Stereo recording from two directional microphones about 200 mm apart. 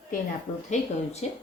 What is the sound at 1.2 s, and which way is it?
Speech, 30° left (ahead or behind).